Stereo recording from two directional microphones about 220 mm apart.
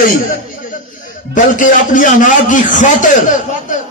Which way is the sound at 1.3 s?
35° left (ahead or behind).